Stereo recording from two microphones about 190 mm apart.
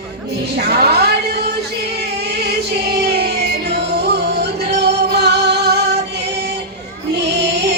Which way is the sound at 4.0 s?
60° right (ahead or behind).